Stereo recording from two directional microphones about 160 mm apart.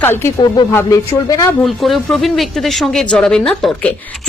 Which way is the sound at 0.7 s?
15° left (ahead or behind).